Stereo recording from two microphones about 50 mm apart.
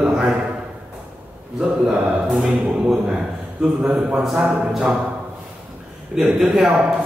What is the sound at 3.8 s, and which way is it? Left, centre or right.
Speech, centre.